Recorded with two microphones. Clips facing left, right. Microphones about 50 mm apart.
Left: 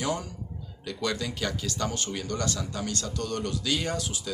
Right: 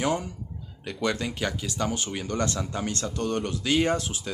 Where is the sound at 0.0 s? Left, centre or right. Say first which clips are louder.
Right 4 dB; right.